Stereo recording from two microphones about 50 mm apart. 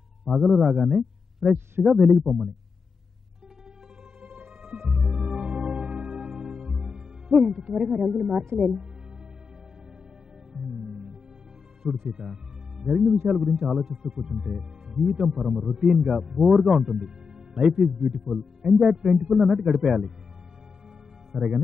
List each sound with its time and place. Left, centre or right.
0.2 s speech: centre
4.2 s music: right
5.1 s music: centre
8.0 s speech: centre
10.5 s music: centre
12.1 s speech: centre
14.2 s speech: centre
19.4 s speech: centre
21.3 s speech: right